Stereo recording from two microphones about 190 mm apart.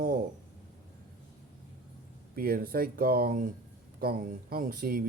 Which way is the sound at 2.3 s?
50° right (ahead or behind).